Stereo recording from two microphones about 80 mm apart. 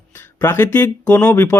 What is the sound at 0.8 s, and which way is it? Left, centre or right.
Speech, centre.